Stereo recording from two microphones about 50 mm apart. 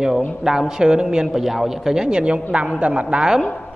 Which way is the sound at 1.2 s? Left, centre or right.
Centre.